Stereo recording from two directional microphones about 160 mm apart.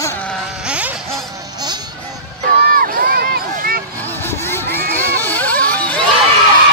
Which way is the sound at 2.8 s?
70° right (ahead or behind).